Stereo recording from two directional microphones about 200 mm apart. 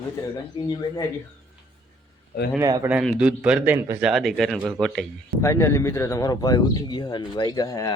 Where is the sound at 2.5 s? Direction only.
15° right (ahead or behind).